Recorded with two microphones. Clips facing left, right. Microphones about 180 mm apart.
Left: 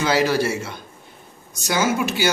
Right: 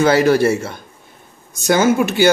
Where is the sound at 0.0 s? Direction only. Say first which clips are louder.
Right 7 dB; 50° right (ahead or behind).